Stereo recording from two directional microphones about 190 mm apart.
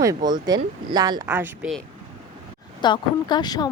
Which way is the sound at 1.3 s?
10° right (ahead or behind).